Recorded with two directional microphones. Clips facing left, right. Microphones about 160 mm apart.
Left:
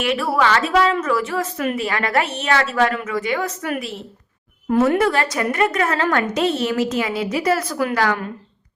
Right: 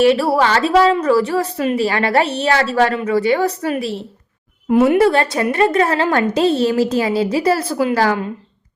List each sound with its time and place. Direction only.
0.0 s a woman's voice: 35° right (ahead or behind)
4.7 s a woman's voice: 15° right (ahead or behind)
4.9 s a woman's voice: 30° right (ahead or behind)